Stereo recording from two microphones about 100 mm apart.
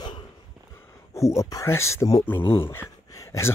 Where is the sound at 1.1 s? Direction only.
30° left (ahead or behind).